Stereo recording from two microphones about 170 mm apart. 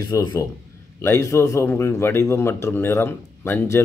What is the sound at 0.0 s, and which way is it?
A man's voice, 20° left (ahead or behind).